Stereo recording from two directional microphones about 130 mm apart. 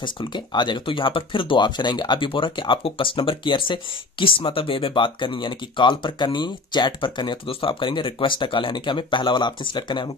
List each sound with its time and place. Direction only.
0.0 s speech: 35° left (ahead or behind)